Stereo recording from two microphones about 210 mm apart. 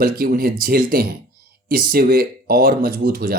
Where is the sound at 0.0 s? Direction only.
45° right (ahead or behind).